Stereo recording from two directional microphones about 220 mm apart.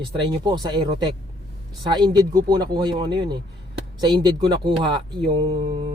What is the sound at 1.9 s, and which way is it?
Speech, 20° right (ahead or behind).